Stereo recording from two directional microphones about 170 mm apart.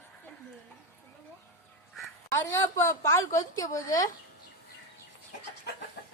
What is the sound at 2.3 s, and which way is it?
A woman's voice, 15° left (ahead or behind).